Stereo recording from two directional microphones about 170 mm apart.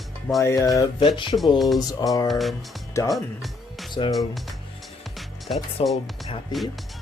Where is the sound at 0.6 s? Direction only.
20° left (ahead or behind).